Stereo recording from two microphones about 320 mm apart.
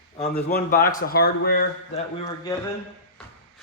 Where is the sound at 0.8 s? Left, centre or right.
Left.